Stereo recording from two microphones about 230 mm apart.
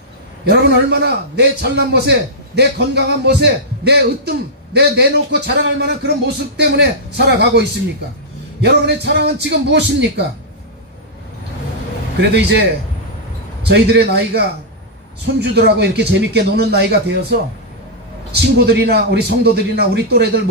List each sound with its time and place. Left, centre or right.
0.5 s a man's voice: right
12.2 s a man's voice: right
13.7 s a man's voice: right
15.5 s a man's voice: right
18.7 s a man's voice: right